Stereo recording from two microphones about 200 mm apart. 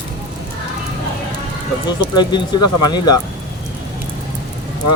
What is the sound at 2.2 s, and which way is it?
Speech, 20° left (ahead or behind).